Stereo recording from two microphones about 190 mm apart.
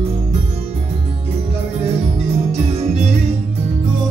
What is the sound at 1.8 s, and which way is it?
Music, 35° right (ahead or behind).